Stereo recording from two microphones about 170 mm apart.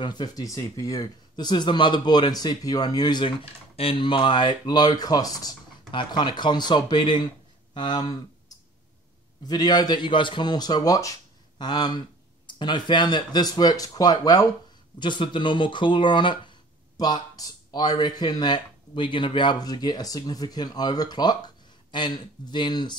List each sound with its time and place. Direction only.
0.0 s speech: 25° left (ahead or behind)